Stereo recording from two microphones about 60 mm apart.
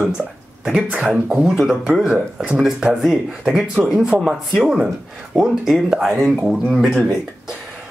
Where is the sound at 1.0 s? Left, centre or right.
Centre.